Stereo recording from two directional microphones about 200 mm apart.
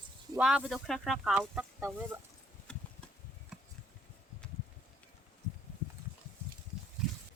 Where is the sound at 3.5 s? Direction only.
5° right (ahead or behind).